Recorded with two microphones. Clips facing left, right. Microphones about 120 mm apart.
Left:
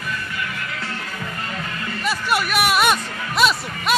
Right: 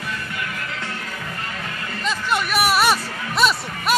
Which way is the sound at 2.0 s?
10° left (ahead or behind).